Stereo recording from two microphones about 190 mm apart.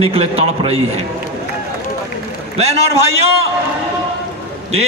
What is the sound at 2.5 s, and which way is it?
Speech, 35° right (ahead or behind).